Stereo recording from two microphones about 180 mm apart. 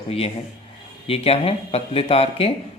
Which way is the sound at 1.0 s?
35° left (ahead or behind).